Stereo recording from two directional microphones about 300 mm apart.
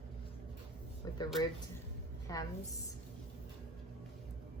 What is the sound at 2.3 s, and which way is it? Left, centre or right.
Speech, centre.